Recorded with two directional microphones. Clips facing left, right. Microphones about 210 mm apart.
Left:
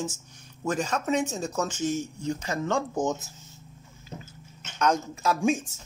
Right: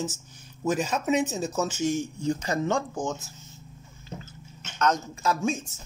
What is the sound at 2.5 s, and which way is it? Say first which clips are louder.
Speech: right 2 dB; 35° right (ahead or behind).